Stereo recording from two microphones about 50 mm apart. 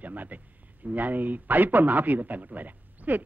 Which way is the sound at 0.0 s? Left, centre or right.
Right.